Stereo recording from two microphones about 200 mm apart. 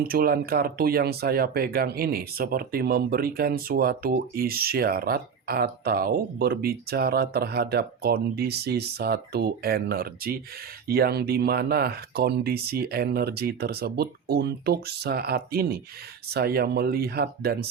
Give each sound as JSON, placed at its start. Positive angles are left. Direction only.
{"t": 0.1, "sound": "speech", "side_deg": -50}